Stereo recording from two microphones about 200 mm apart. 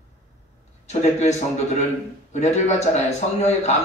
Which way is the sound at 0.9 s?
35° left (ahead or behind).